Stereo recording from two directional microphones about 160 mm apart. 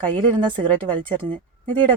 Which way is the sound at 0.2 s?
30° right (ahead or behind).